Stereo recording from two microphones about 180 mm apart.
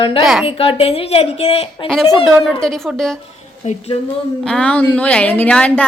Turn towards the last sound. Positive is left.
turn(degrees=5)  # may be behind; listen again after turning